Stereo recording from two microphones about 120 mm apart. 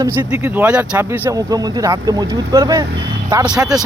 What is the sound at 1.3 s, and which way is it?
Speech, 30° right (ahead or behind).